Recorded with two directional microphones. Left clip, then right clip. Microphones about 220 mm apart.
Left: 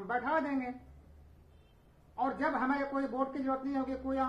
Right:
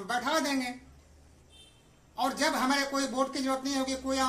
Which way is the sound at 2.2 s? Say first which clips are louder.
Right 4 dB; 20° right (ahead or behind).